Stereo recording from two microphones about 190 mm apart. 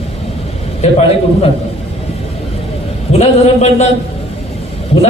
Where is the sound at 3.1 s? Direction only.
35° left (ahead or behind).